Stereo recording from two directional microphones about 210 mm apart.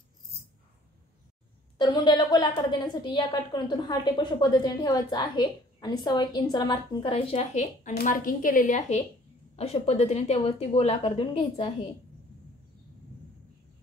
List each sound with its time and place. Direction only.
1.8 s a woman's voice: 20° left (ahead or behind)